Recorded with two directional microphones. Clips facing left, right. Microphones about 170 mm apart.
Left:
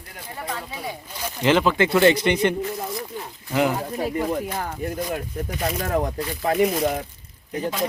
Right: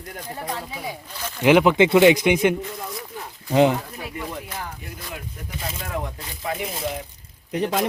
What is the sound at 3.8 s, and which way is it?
Speech, 35° left (ahead or behind).